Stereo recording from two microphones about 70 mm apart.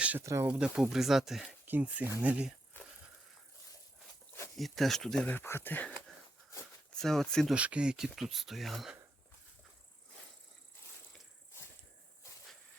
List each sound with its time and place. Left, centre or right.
0.2 s speech: right
0.6 s speech: centre
1.6 s speech: right
4.5 s speech: centre
5.3 s speech: left
6.9 s speech: centre
7.5 s speech: centre